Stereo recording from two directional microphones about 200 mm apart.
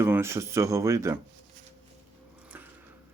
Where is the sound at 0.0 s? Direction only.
10° right (ahead or behind).